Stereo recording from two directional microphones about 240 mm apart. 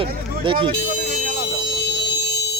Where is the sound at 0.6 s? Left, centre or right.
Right.